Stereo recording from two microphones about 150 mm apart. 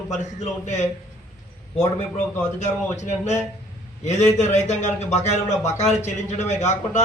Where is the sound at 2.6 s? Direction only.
50° left (ahead or behind).